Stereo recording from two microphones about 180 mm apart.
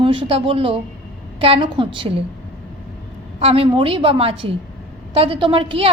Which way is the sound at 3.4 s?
35° right (ahead or behind).